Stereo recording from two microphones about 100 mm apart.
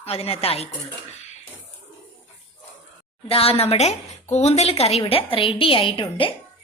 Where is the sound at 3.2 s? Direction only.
80° left.